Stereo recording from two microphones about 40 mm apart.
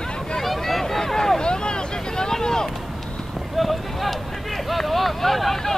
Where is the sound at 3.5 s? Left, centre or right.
Centre.